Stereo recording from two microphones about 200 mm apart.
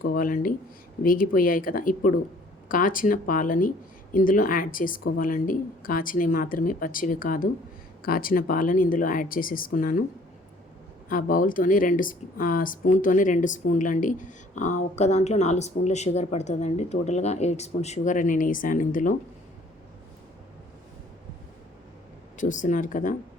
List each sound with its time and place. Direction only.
0.0 s speech: 45° left (ahead or behind)
11.1 s speech: 45° left (ahead or behind)
22.4 s speech: 40° left (ahead or behind)